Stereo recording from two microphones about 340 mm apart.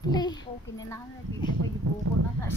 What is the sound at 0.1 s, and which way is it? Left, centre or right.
Speech, centre.